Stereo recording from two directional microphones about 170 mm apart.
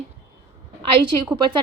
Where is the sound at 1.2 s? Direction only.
30° right (ahead or behind).